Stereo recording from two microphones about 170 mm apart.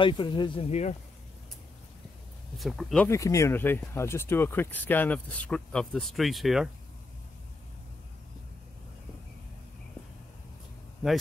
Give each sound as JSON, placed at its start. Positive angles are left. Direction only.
{"t": 0.0, "sound": "speech", "side_deg": 30}
{"t": 2.5, "sound": "speech", "side_deg": 0}
{"t": 3.1, "sound": "speech", "side_deg": 20}